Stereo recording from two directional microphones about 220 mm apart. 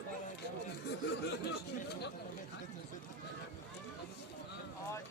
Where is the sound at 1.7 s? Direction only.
50° left (ahead or behind).